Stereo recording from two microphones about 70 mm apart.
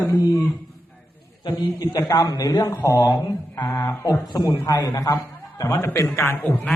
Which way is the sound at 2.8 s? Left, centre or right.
Left.